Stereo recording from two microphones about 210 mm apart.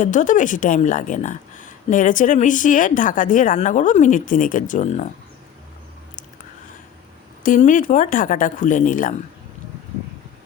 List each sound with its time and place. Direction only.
0.0 s speech: 35° left (ahead or behind)
7.4 s speech: 40° left (ahead or behind)